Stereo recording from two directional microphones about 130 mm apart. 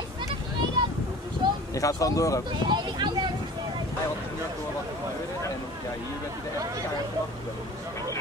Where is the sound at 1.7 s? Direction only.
25° left (ahead or behind).